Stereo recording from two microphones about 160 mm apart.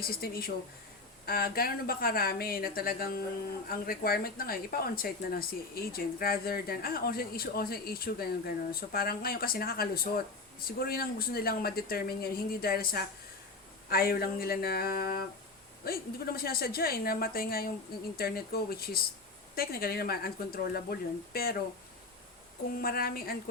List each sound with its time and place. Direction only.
0.0 s speech: 70° left (ahead or behind)
22.8 s speech: 70° left (ahead or behind)